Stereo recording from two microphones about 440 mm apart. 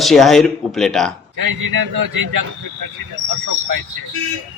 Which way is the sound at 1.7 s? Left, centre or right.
Right.